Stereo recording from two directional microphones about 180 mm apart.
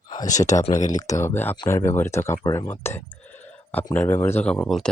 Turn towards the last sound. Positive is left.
turn(degrees=0)  # may be behind; listen again after turning